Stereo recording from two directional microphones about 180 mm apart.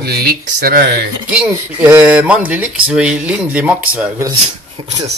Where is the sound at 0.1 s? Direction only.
60° right (ahead or behind).